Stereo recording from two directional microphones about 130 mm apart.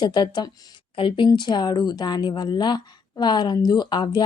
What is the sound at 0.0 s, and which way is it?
Speech, 35° left (ahead or behind).